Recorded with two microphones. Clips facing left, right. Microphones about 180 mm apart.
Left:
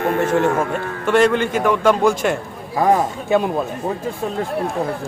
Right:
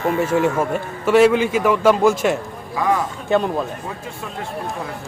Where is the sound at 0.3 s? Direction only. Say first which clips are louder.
Left 1 dB; 50° left (ahead or behind).